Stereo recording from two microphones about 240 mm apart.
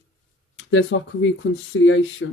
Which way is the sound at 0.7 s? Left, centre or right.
Left.